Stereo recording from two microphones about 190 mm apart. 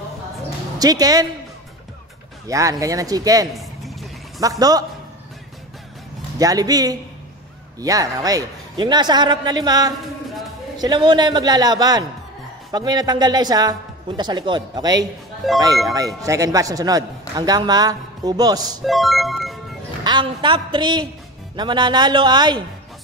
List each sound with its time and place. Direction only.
0.7 s speech: 20° right (ahead or behind)
2.4 s speech: 15° right (ahead or behind)
3.5 s a sound: centre (ahead or behind)
4.4 s speech: 20° right (ahead or behind)
6.3 s speech: 20° right (ahead or behind)
15.4 s speech: centre (ahead or behind)
16.2 s speech: 15° right (ahead or behind)
18.9 s music: centre (ahead or behind)
20.0 s speech: 25° right (ahead or behind)